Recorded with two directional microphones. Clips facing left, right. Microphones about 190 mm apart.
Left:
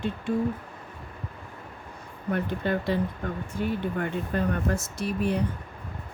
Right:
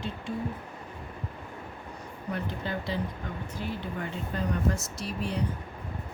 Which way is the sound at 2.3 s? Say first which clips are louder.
Left 7 dB; 55° left (ahead or behind).